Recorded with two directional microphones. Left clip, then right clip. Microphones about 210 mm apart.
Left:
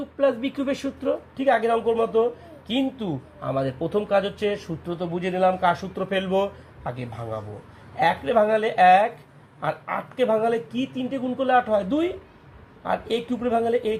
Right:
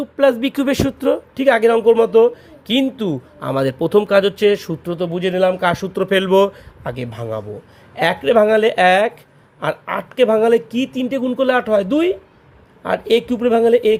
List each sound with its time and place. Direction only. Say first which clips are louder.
0.2 s speech: right 8 dB; 55° right (ahead or behind)